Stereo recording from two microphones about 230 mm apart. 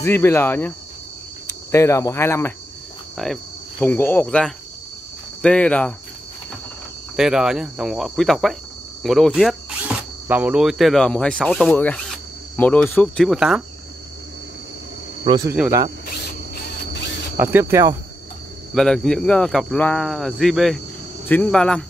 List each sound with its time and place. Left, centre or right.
0.0 s speech: centre
1.5 s cricket: centre
3.2 s speech: centre
7.2 s speech: centre
15.2 s speech: centre
15.5 s speech: centre
17.4 s speech: centre
18.8 s speech: centre